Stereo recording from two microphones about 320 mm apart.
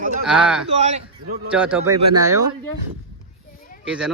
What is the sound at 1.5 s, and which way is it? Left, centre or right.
Speech, centre.